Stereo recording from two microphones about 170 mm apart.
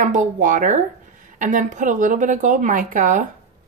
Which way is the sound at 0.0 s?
50° right (ahead or behind).